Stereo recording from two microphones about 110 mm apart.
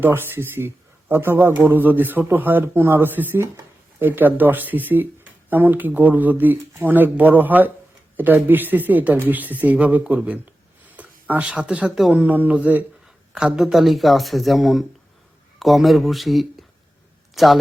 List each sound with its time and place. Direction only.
0.0 s speech: 20° right (ahead or behind); by 12.1 s 5° right (ahead or behind)
12.1 s speech: 15° right (ahead or behind)